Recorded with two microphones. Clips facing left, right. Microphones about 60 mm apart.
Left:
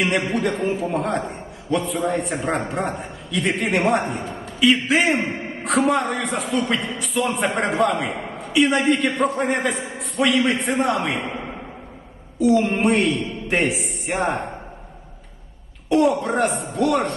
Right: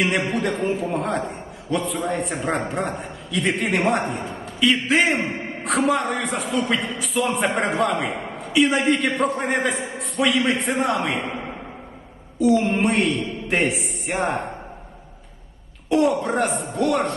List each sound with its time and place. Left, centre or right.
0.3 s a man's voice: centre
12.4 s a man's voice: centre
15.9 s a man's voice: centre